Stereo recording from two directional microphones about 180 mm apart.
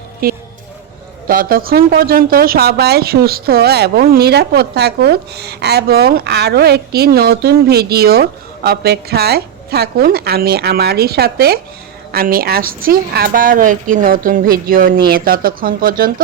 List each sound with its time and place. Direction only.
0.2 s a woman's voice: 55° right (ahead or behind)